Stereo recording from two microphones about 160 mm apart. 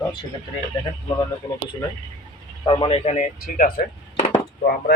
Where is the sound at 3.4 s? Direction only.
55° left (ahead or behind).